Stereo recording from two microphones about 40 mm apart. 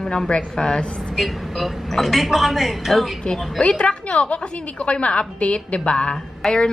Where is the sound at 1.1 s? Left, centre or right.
Centre.